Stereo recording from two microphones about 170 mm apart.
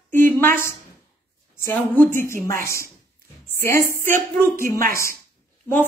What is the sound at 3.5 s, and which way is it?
Music, 15° left (ahead or behind).